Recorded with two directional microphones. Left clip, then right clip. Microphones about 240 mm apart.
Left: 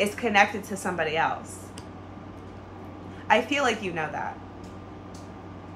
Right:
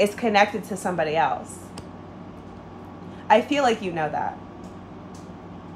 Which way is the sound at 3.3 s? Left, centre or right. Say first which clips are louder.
Right 4 dB; right.